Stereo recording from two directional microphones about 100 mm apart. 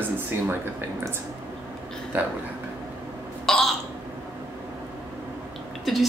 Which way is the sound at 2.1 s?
20° right (ahead or behind).